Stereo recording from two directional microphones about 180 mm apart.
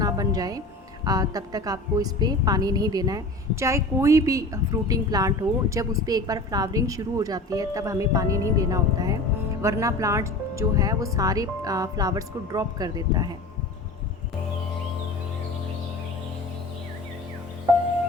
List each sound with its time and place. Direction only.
0.0 s music: 20° right (ahead or behind)
1.0 s a woman's voice: 20° right (ahead or behind)